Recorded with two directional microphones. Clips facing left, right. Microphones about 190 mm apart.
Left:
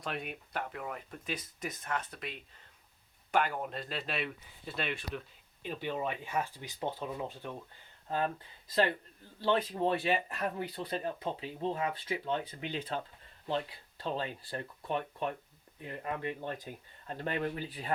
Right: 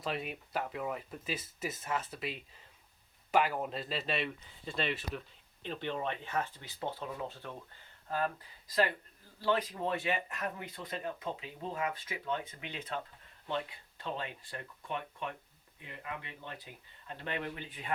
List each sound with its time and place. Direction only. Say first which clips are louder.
0.0 s speech: right 2 dB; centre (ahead or behind); by 17.9 s 35° left (ahead or behind)